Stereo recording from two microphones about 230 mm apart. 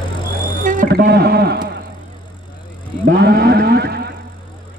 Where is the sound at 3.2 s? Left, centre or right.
Right.